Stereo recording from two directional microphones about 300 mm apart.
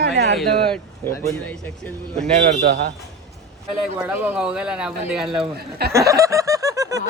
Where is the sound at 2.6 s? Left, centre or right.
Right.